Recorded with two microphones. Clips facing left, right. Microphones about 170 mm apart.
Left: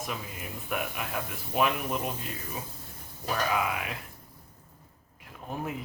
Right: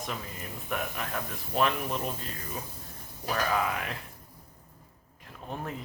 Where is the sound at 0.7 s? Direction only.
5° left (ahead or behind).